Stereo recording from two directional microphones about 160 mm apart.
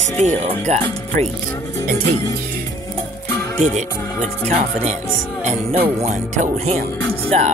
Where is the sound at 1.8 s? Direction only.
65° right (ahead or behind).